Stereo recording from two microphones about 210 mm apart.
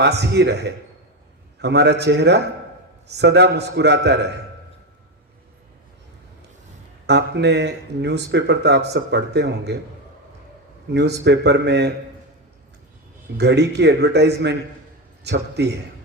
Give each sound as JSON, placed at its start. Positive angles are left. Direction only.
{"t": 0.0, "sound": "speech", "side_deg": -55}
{"t": 7.1, "sound": "speech", "side_deg": -55}
{"t": 10.9, "sound": "speech", "side_deg": -55}
{"t": 13.3, "sound": "speech", "side_deg": -50}